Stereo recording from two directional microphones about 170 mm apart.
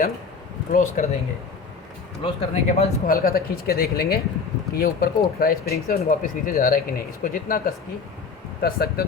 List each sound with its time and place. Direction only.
0.7 s speech: 50° left (ahead or behind)
2.2 s speech: 40° left (ahead or behind)
3.1 s speech: 60° left (ahead or behind)
6.1 s speech: 55° left (ahead or behind)